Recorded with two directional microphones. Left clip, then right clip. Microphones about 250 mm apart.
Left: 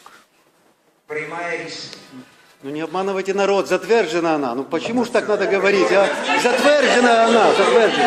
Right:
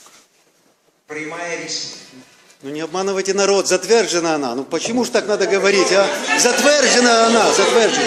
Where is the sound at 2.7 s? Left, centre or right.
Right.